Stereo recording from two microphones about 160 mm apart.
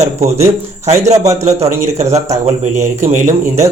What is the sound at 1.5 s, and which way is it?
A man's voice, 45° right (ahead or behind).